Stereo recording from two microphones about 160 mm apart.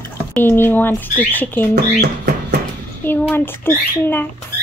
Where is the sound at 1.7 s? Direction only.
90° right.